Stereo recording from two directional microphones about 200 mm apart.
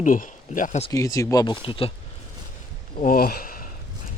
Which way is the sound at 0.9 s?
15° left (ahead or behind).